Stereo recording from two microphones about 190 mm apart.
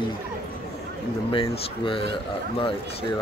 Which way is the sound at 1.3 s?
25° left (ahead or behind).